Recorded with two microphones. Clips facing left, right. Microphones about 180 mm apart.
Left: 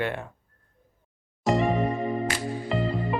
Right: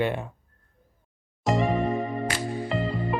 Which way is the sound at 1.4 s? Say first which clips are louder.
Left 1 dB; centre (ahead or behind).